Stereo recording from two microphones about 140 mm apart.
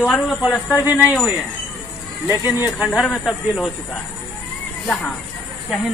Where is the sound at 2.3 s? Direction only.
15° right (ahead or behind); by 3.7 s centre (ahead or behind).